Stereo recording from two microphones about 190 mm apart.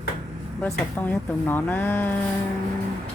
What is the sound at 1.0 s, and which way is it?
Speech, 10° left (ahead or behind).